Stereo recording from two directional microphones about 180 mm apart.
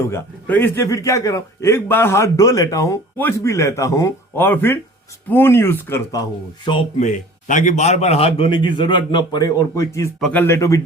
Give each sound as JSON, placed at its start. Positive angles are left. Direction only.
{"t": 0.1, "sound": "a man's voice", "side_deg": 10}
{"t": 7.0, "sound": "a man's voice", "side_deg": 45}